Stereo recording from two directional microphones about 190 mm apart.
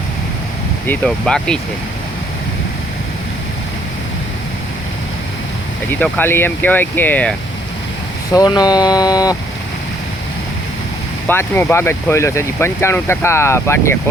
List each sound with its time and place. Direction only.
0.9 s speech: 5° left (ahead or behind)
5.9 s speech: 10° left (ahead or behind)
8.3 s speech: 20° left (ahead or behind)
11.3 s speech: 10° left (ahead or behind)